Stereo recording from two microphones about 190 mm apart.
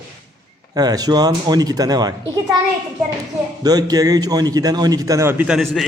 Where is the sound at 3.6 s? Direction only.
20° right (ahead or behind); by 5.9 s centre (ahead or behind).